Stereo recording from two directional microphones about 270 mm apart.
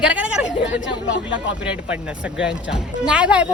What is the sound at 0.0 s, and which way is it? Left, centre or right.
Chatter, centre.